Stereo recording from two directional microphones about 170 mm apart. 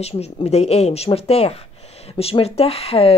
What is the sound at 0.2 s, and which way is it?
A woman's voice, 40° left (ahead or behind).